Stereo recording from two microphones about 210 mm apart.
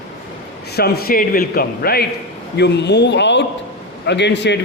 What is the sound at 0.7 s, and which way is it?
A man's voice, 50° left (ahead or behind).